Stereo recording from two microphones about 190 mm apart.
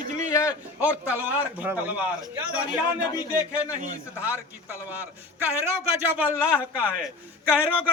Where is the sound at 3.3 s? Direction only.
10° right (ahead or behind).